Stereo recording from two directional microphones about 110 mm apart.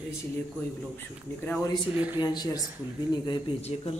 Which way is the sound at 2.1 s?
40° left (ahead or behind).